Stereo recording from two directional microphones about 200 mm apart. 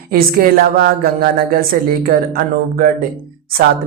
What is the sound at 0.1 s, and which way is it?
Speech, 45° right (ahead or behind).